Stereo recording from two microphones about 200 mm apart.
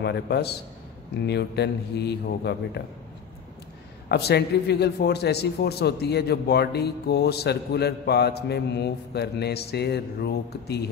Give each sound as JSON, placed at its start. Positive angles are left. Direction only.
{"t": 0.0, "sound": "a man's voice", "side_deg": 55}
{"t": 4.1, "sound": "a man's voice", "side_deg": 55}